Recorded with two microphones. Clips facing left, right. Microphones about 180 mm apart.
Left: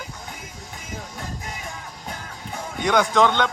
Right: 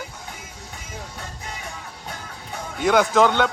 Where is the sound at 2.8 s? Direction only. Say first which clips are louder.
Right 2 dB; 5° right (ahead or behind).